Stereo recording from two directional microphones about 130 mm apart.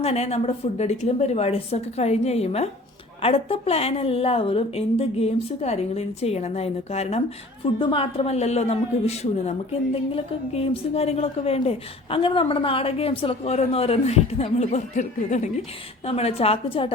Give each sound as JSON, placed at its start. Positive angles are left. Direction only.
{"t": 0.0, "sound": "a woman's voice", "side_deg": 55}
{"t": 7.6, "sound": "a woman's voice", "side_deg": 40}
{"t": 16.0, "sound": "a woman's voice", "side_deg": 50}